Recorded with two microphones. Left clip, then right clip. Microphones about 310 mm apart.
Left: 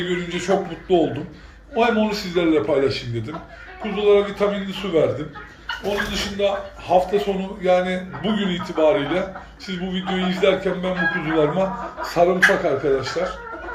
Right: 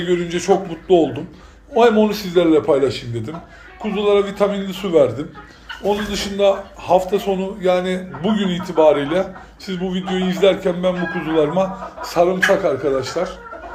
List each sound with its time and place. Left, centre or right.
0.0 s a man's voice: centre